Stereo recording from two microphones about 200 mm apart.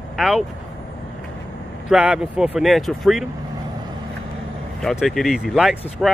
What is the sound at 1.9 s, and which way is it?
Speech, 5° right (ahead or behind).